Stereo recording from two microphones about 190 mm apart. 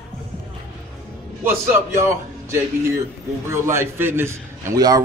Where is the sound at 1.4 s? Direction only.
15° right (ahead or behind).